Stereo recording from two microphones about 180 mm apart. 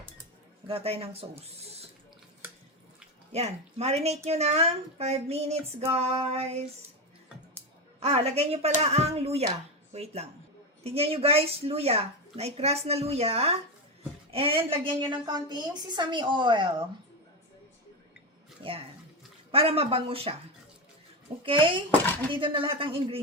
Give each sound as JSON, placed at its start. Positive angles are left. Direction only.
{"t": 0.7, "sound": "a woman's voice", "side_deg": -35}
{"t": 3.3, "sound": "a woman's voice", "side_deg": -35}
{"t": 7.9, "sound": "a woman's voice", "side_deg": -35}
{"t": 19.5, "sound": "a woman's voice", "side_deg": -30}
{"t": 21.4, "sound": "a woman's voice", "side_deg": -30}